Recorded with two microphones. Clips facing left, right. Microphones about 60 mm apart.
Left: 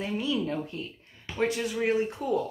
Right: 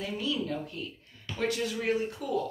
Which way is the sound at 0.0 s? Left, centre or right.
Left.